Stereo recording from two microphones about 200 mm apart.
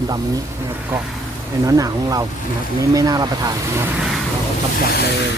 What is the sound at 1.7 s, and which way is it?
Speech, 15° right (ahead or behind).